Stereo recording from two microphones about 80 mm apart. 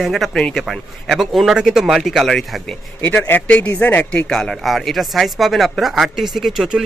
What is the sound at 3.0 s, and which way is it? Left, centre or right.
Speech, left.